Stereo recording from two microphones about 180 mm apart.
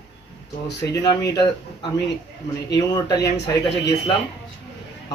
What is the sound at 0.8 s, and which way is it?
Speech, 20° left (ahead or behind).